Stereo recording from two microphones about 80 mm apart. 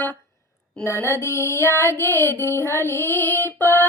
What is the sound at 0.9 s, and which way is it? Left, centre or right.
Child singing, left.